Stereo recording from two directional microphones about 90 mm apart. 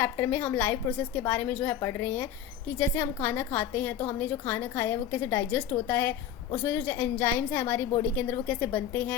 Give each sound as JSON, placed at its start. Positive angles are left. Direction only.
{"t": 0.0, "sound": "a woman's voice", "side_deg": 25}